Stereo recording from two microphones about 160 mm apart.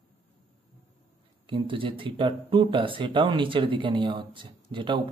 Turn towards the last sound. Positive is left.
turn(degrees=-30)  # may be behind; listen again after turning